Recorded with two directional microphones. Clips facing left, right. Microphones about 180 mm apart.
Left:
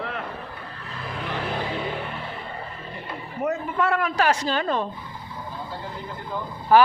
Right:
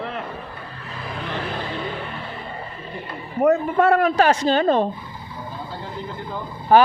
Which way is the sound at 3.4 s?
55° right (ahead or behind).